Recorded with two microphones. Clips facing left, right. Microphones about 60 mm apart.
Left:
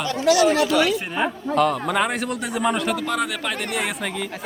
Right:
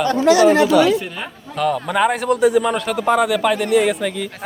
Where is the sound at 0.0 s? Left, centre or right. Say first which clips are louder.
Right 5 dB; right.